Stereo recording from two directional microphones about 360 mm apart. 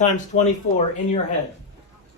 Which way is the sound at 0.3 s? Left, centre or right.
Left.